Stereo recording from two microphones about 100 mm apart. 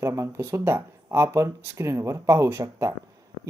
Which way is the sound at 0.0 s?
30° right (ahead or behind).